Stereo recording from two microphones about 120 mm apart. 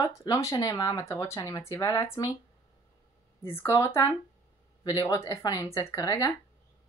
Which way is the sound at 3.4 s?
20° left (ahead or behind).